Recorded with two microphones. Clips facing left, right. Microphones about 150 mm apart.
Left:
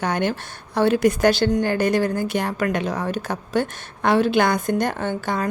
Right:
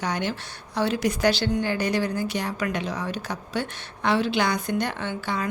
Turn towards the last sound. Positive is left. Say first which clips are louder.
# left 5 dB
turn(degrees=45)  # may be behind; listen again after turning